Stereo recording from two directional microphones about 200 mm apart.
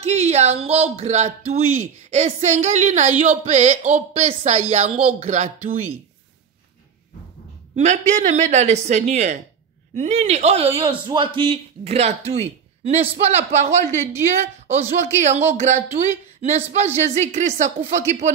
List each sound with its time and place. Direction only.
0.0 s speech: 35° right (ahead or behind)
7.7 s speech: 35° right (ahead or behind)